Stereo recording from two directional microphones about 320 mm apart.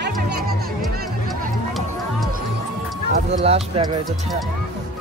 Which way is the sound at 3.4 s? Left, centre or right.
Centre.